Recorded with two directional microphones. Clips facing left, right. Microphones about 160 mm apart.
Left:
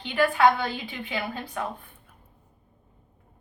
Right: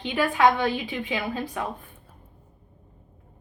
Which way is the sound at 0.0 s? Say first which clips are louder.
Even; 15° right (ahead or behind).